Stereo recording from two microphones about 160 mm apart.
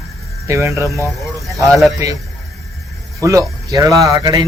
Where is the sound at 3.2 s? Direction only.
20° right (ahead or behind).